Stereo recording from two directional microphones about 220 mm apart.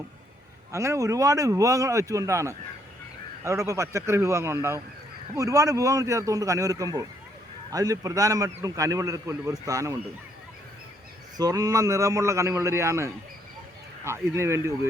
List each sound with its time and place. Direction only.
0.7 s speech: 15° right (ahead or behind)
11.3 s speech: 15° right (ahead or behind)